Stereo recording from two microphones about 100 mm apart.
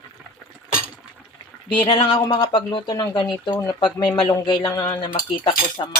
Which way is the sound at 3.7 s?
50° left (ahead or behind).